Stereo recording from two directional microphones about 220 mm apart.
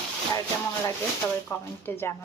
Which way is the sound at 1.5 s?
15° left (ahead or behind).